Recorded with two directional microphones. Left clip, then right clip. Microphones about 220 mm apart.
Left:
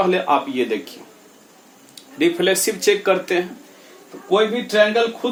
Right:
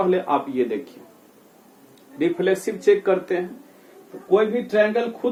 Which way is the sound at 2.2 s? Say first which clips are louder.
Left 4 dB; 15° left (ahead or behind).